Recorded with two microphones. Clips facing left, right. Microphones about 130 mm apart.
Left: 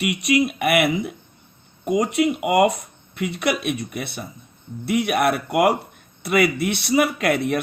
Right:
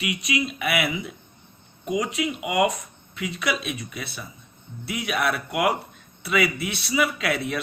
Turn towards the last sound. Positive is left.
turn(degrees=55)  # may be behind; listen again after turning